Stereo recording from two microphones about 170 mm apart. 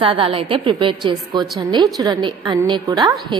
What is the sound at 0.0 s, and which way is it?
A woman's voice, 30° right (ahead or behind).